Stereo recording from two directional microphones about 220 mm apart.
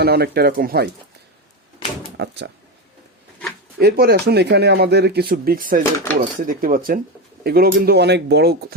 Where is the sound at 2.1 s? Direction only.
50° right (ahead or behind).